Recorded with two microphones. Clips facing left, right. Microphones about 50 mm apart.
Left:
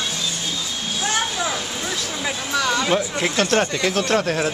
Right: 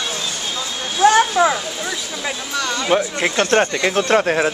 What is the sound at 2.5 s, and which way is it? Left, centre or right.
Speech, centre.